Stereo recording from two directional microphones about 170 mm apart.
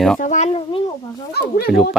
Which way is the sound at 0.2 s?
45° left (ahead or behind).